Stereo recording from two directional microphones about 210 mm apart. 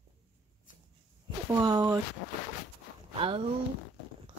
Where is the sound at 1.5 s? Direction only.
15° right (ahead or behind).